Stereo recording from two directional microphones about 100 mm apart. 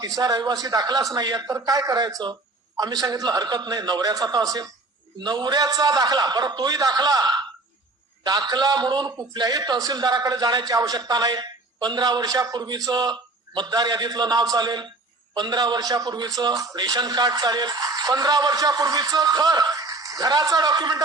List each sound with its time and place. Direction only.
0.2 s a man's voice: 45° right (ahead or behind)